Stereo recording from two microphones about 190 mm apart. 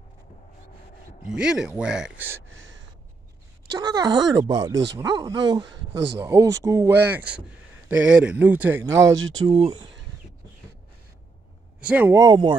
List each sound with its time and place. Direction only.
1.2 s speech: 5° right (ahead or behind)
2.5 s gasp: 85° right
3.7 s speech: 20° right (ahead or behind)
9.0 s speech: 90° right
9.5 s speech: 25° right (ahead or behind)
11.9 s speech: 15° right (ahead or behind)